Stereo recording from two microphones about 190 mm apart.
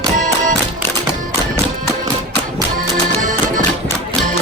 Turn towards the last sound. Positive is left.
turn(degrees=-40)  # may be behind; listen again after turning